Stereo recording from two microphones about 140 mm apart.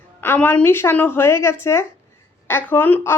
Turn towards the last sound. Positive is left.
turn(degrees=15)  # may be behind; listen again after turning